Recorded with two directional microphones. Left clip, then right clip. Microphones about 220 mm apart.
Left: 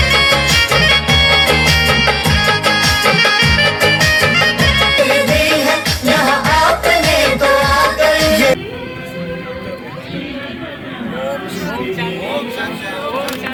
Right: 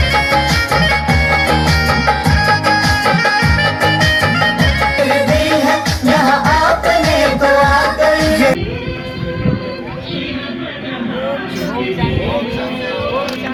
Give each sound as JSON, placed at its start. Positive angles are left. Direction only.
{"t": 0.0, "sound": "music", "side_deg": 45}